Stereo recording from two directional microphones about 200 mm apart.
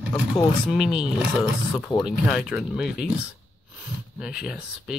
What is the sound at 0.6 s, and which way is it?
Speech, centre (ahead or behind).